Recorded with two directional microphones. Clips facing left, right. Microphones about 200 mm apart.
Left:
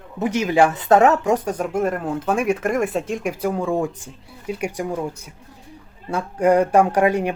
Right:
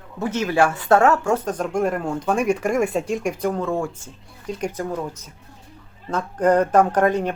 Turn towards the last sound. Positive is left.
turn(degrees=10)  # may be behind; listen again after turning